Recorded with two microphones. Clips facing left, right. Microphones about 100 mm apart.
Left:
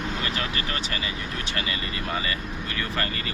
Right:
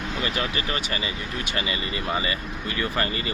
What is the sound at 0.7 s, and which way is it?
Speech, 10° right (ahead or behind).